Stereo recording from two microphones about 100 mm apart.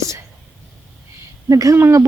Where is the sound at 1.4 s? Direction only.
35° right (ahead or behind).